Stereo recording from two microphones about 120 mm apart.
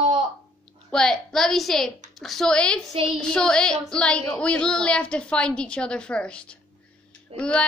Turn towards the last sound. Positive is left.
turn(degrees=10)  # may be behind; listen again after turning